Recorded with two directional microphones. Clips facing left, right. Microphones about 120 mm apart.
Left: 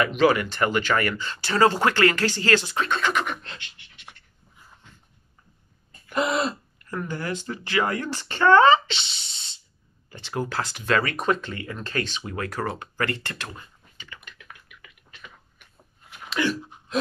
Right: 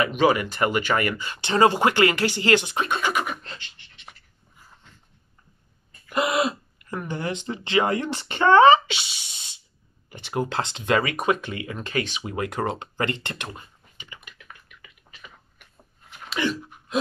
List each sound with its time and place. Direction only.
0.0 s speech: 5° right (ahead or behind)
6.0 s throat clearing: 5° right (ahead or behind)
6.9 s speech: 20° right (ahead or behind)
14.4 s a sound: centre (ahead or behind)